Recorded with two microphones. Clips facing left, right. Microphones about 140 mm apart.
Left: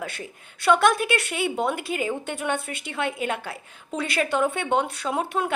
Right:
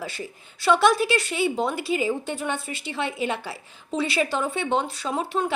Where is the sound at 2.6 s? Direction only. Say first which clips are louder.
Right 1 dB; 55° left (ahead or behind).